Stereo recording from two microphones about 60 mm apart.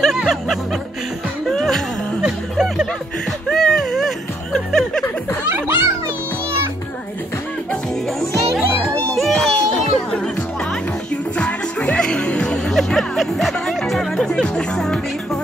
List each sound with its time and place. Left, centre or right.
1.5 s music: centre
2.2 s music: centre
3.4 s music: centre
5.5 s music: right
9.1 s a sound: centre
11.3 s music: centre
12.7 s music: centre